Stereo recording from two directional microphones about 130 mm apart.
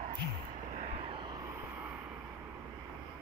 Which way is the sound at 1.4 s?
15° right (ahead or behind).